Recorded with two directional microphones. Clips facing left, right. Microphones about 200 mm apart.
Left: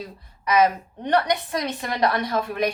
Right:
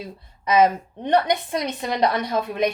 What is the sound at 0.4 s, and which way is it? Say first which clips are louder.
A woman's voice: right 2 dB; 25° right (ahead or behind).